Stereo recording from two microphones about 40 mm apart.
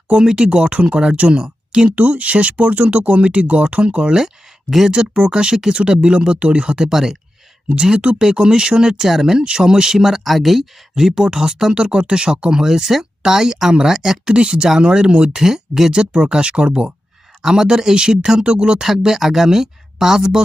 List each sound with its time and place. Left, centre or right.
0.1 s speech: centre
2.0 s speech: right; by 7.2 s centre
7.7 s speech: right
18.8 s speech: centre